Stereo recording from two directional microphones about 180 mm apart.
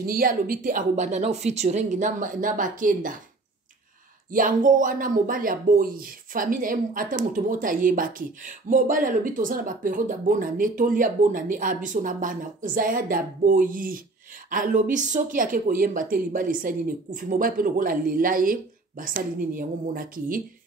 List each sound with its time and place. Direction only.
0.0 s speech: 55° right (ahead or behind)
4.3 s speech: 50° right (ahead or behind)